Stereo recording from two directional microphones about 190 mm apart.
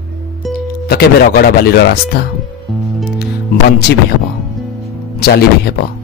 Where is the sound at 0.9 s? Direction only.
55° left (ahead or behind).